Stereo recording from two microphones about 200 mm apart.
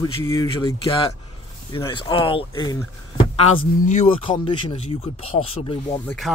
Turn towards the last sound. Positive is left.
turn(degrees=0)  # may be behind; listen again after turning